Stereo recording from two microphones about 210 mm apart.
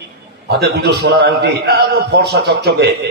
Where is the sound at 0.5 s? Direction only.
50° right (ahead or behind).